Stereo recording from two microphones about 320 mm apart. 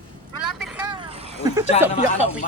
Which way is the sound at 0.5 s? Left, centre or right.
Centre.